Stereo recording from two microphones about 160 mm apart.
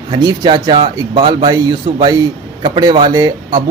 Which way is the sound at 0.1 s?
30° right (ahead or behind).